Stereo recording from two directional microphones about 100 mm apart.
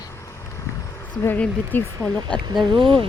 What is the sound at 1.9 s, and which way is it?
Speech, 40° right (ahead or behind).